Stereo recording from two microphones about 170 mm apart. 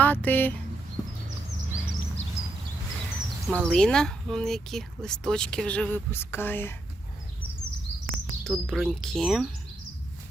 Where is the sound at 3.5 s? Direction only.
5° left (ahead or behind).